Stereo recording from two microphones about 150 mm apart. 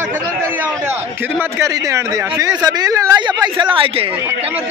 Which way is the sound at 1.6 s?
20° right (ahead or behind).